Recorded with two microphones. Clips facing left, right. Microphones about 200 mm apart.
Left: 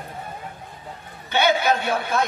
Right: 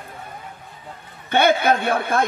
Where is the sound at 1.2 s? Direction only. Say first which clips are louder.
Right 3 dB; 55° right (ahead or behind).